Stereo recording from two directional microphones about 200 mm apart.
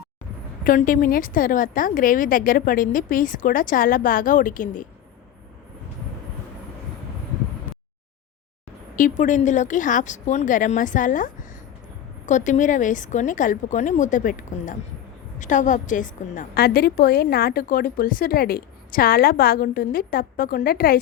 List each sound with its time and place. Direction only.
0.6 s a woman's voice: 45° left (ahead or behind)
9.0 s a woman's voice: 40° left (ahead or behind)